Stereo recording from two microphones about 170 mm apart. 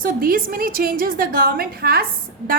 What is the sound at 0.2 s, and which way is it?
A woman's voice, 55° right (ahead or behind).